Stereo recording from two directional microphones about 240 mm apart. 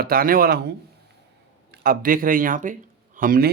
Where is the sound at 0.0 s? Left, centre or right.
Right.